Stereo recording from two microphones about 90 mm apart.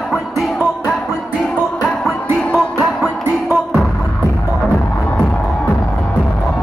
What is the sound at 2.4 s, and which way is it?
Music, 5° left (ahead or behind).